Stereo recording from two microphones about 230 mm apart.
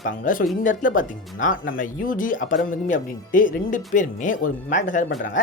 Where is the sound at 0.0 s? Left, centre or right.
Left.